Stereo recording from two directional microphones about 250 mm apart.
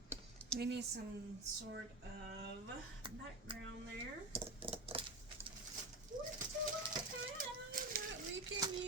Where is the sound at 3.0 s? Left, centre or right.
Centre.